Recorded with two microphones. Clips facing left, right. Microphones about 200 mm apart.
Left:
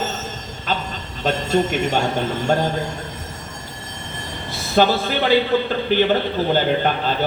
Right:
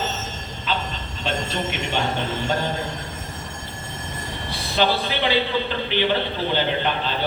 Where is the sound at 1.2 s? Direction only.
45° left (ahead or behind).